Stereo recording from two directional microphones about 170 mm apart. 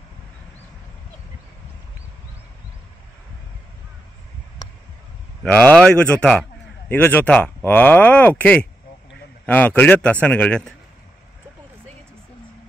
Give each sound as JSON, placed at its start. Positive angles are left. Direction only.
{"t": 5.4, "sound": "speech", "side_deg": 10}